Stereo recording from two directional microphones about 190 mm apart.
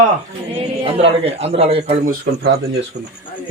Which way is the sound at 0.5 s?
30° right (ahead or behind).